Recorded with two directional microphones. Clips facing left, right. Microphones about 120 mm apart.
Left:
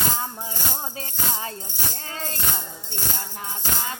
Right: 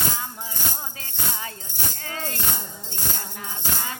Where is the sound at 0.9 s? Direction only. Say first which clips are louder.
Left 3 dB; 30° left (ahead or behind).